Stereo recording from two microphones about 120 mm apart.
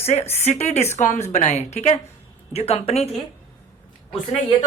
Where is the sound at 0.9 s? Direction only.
80° left; by 3.0 s 60° left (ahead or behind).